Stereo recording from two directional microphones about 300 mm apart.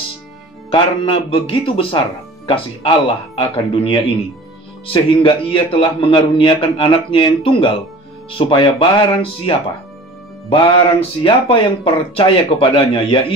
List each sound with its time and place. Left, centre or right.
0.7 s a man's voice: centre